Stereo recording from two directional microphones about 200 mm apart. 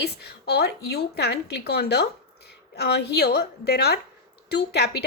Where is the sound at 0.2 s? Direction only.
55° left (ahead or behind).